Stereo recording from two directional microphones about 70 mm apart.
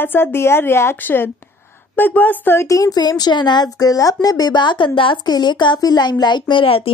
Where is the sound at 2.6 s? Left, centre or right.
Left.